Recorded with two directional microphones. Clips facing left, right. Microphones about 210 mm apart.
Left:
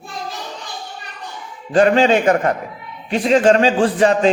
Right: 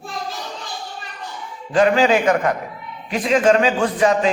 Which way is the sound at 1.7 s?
30° left (ahead or behind).